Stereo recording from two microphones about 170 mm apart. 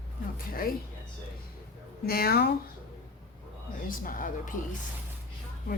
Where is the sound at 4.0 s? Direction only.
55° left (ahead or behind).